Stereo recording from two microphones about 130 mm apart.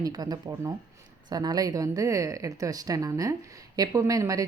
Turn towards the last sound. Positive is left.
turn(degrees=-25)  # may be behind; listen again after turning